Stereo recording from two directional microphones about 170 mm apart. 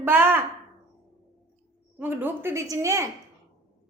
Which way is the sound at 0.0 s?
10° right (ahead or behind).